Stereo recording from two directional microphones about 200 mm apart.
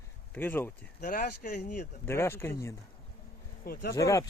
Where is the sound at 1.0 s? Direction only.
50° left (ahead or behind).